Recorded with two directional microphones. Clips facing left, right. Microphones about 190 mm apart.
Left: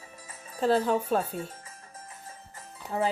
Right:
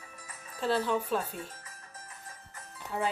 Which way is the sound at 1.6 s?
25° left (ahead or behind).